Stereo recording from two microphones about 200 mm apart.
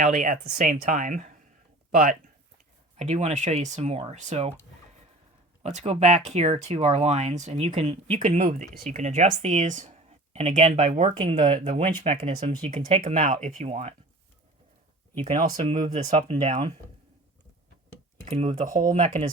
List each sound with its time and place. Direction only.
0.0 s speech: 40° right (ahead or behind)
5.6 s speech: 35° right (ahead or behind)
13.2 s speech: 40° right (ahead or behind)
15.2 s speech: 35° right (ahead or behind)
16.0 s speech: 25° right (ahead or behind)
18.3 s speech: 30° right (ahead or behind)